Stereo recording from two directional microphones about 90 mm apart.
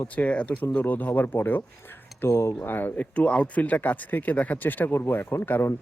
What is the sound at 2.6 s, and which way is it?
Speech, 20° left (ahead or behind).